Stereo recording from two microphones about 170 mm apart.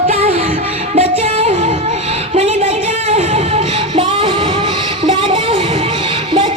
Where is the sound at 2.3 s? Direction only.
40° right (ahead or behind).